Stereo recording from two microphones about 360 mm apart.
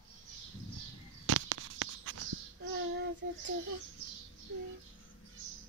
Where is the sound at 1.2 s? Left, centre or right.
Right.